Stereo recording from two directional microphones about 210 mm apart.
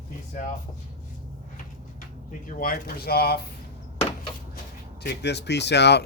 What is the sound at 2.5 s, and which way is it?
Speech, 45° left (ahead or behind).